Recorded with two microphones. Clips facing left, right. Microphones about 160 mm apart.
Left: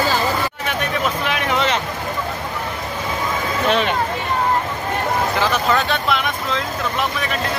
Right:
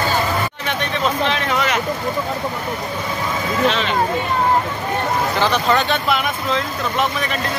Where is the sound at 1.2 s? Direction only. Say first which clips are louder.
Right 1 dB; 15° left (ahead or behind).